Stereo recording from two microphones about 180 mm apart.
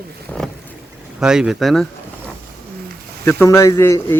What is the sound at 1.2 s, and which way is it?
Speech, 5° right (ahead or behind).